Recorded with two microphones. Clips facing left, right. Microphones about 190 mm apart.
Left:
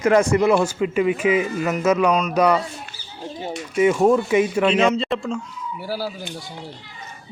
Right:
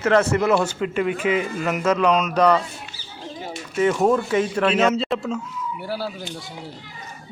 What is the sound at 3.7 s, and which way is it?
Speech, 10° left (ahead or behind).